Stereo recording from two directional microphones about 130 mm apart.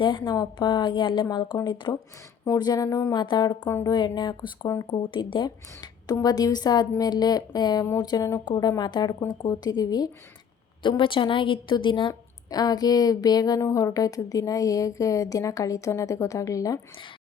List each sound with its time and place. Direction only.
0.0 s speech: 35° left (ahead or behind)
3.7 s a woman's voice: 20° left (ahead or behind)
3.9 s speech: 35° left (ahead or behind)
10.8 s a woman's voice: 40° left (ahead or behind)